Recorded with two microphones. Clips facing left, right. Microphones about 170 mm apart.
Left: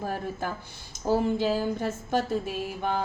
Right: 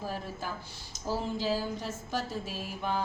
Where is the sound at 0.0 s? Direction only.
55° left (ahead or behind).